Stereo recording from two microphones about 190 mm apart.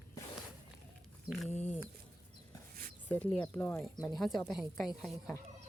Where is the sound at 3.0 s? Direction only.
10° left (ahead or behind).